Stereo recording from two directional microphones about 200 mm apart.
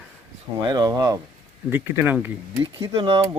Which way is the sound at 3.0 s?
25° right (ahead or behind).